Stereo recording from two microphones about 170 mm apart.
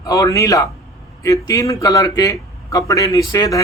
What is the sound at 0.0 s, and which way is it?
A man's voice, 20° left (ahead or behind).